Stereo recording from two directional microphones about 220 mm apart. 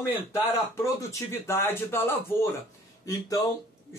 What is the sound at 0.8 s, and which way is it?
Speech, 15° left (ahead or behind).